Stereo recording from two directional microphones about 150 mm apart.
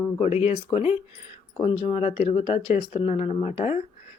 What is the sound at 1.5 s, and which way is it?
Speech, 30° left (ahead or behind).